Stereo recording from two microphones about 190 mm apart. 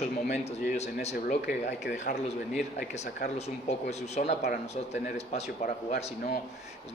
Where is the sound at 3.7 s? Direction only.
35° left (ahead or behind).